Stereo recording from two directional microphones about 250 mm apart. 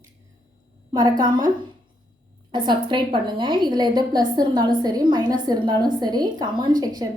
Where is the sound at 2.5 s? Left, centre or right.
Centre.